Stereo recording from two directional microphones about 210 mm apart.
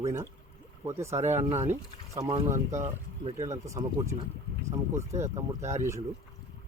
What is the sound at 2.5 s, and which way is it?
Speech, 35° right (ahead or behind).